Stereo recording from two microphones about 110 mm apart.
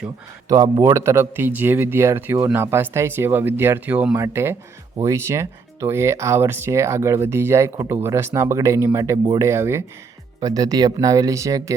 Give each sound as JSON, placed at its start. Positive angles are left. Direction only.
{"t": 0.4, "sound": "speech", "side_deg": -35}
{"t": 0.9, "sound": "speech", "side_deg": -25}
{"t": 10.4, "sound": "speech", "side_deg": -35}